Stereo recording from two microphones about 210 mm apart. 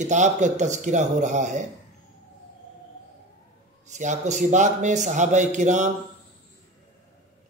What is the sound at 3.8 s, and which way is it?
Speech, 35° right (ahead or behind).